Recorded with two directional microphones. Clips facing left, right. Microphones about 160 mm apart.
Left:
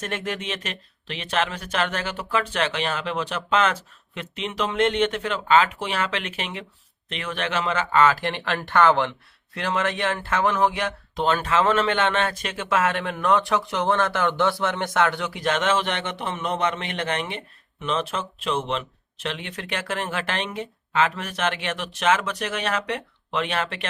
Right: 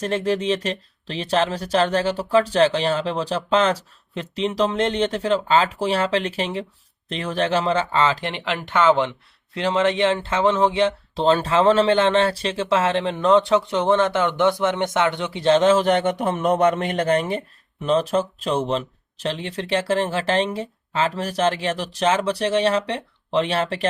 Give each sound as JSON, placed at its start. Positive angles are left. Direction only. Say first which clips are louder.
{"t": 0.0, "sound": "speech", "louder": "right 8 dB", "side_deg": -30}